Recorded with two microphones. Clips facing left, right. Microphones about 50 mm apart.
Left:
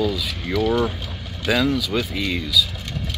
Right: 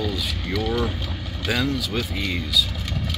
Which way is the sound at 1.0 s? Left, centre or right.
Centre.